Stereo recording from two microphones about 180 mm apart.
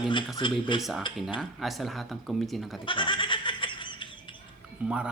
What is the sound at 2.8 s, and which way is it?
Goat, 25° left (ahead or behind).